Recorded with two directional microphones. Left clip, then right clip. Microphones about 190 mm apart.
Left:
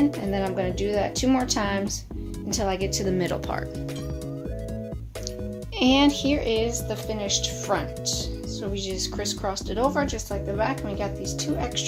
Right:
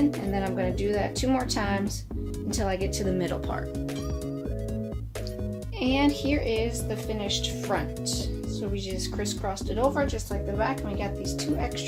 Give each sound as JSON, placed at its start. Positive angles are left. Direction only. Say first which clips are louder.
{"t": 0.3, "sound": "a woman's voice", "louder": "left 2 dB", "side_deg": 30}
{"t": 5.8, "sound": "a woman's voice", "louder": "left 5 dB", "side_deg": 45}